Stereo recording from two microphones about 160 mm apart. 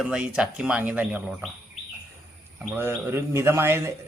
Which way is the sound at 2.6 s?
15° right (ahead or behind).